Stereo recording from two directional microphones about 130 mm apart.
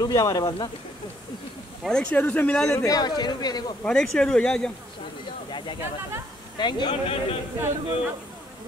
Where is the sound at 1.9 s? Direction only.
5° left (ahead or behind); by 3.7 s 30° left (ahead or behind).